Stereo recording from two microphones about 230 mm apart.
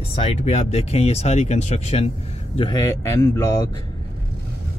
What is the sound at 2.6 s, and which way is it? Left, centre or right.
Speech, centre.